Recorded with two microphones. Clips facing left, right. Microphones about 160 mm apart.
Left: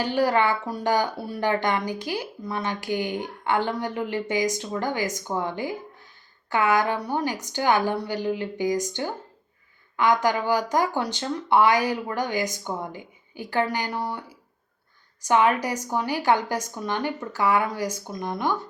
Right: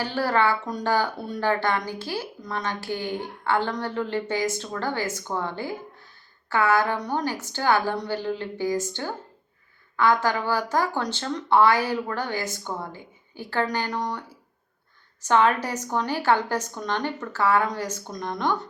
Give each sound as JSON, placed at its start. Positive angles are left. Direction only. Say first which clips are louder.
{"t": 0.0, "sound": "speech", "louder": "left 2 dB", "side_deg": 15}